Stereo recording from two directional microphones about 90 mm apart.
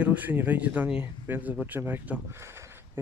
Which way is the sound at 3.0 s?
25° right (ahead or behind).